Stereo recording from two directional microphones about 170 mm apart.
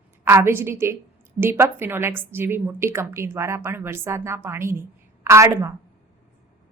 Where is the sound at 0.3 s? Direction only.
15° right (ahead or behind).